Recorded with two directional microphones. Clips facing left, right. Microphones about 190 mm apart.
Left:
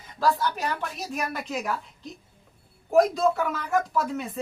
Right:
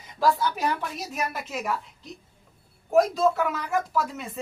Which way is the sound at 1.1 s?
5° right (ahead or behind).